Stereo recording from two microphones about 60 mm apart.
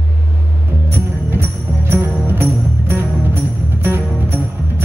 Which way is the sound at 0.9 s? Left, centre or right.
Right.